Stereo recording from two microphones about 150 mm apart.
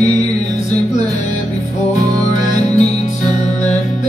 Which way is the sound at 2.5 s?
50° left (ahead or behind).